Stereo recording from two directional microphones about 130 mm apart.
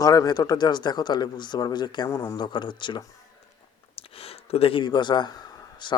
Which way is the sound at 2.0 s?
25° left (ahead or behind).